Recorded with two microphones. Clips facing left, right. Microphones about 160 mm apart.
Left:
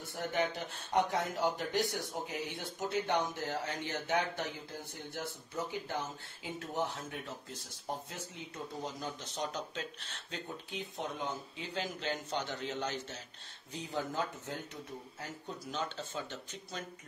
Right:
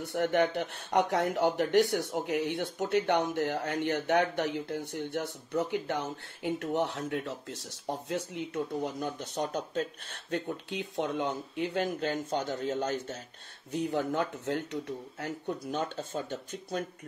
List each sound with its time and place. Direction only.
0.0 s speech: 70° right (ahead or behind); by 13.2 s 45° right (ahead or behind)
13.7 s speech: 60° right (ahead or behind)